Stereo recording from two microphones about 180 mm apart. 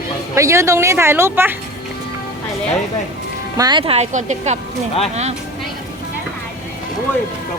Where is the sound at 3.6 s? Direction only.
25° right (ahead or behind).